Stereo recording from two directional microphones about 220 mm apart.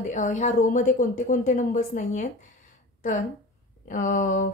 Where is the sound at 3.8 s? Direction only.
35° left (ahead or behind).